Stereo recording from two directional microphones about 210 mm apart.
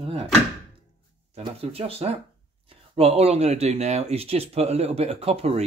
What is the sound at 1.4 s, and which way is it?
Speech, 25° right (ahead or behind).